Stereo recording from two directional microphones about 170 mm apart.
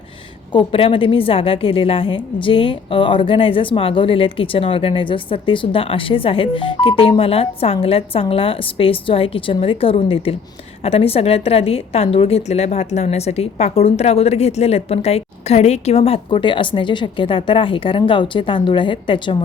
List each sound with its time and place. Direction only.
0.5 s a woman's voice: 30° left (ahead or behind)